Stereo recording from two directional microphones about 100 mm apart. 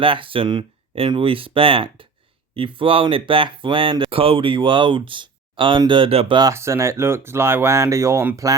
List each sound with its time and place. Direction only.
0.0 s speech: 60° right (ahead or behind)
6.5 s speech: 30° right (ahead or behind)